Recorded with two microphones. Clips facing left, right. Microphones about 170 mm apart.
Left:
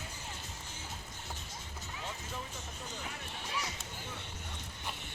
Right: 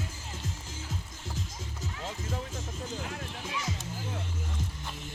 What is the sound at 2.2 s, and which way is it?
Music, 90° right.